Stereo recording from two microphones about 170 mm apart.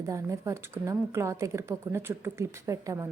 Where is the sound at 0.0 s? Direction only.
20° right (ahead or behind).